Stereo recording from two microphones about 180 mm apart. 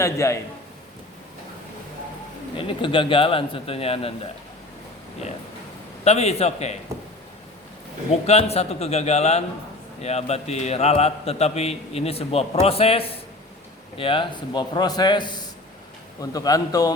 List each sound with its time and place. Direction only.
0.0 s a man's voice: 15° left (ahead or behind)
2.6 s a man's voice: 30° left (ahead or behind)
6.1 s a man's voice: 35° left (ahead or behind)
8.3 s a man's voice: 35° left (ahead or behind); by 16.9 s 20° left (ahead or behind)